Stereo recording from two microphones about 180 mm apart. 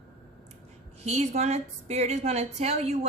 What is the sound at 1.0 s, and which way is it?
A woman's voice, 40° right (ahead or behind).